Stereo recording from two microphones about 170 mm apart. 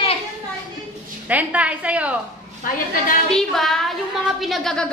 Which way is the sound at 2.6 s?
55° left (ahead or behind).